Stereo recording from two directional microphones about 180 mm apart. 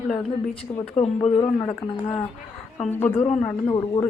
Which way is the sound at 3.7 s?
30° left (ahead or behind).